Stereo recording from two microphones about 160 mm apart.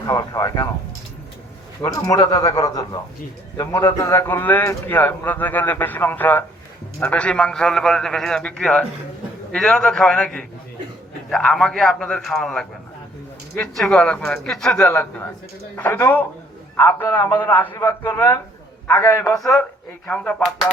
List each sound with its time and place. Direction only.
0.0 s a man's voice: 25° left (ahead or behind)
1.8 s a man's voice: 20° left (ahead or behind)